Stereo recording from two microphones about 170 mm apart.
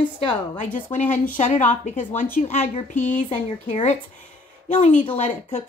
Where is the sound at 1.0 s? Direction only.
10° left (ahead or behind).